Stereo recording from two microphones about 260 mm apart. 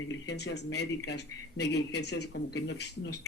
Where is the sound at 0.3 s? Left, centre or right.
Left.